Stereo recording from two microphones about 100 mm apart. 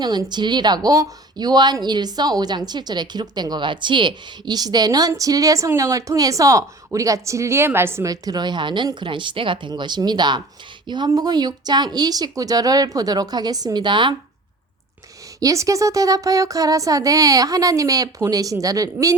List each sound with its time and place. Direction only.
0.0 s a woman's voice: 45° right (ahead or behind); by 8.1 s 25° right (ahead or behind)
8.1 s a woman's voice: 40° right (ahead or behind)
15.4 s a woman's voice: 35° right (ahead or behind)